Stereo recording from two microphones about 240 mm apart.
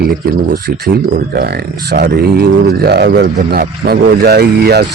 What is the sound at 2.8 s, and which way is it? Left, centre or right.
Speech, right.